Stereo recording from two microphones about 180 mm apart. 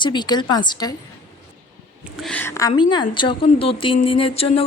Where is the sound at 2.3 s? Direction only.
15° left (ahead or behind).